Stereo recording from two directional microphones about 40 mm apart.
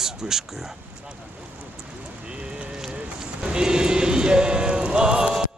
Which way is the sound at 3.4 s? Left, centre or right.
Centre.